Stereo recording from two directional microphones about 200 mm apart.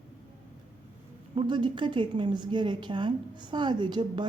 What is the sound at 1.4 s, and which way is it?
A woman's voice, 25° right (ahead or behind).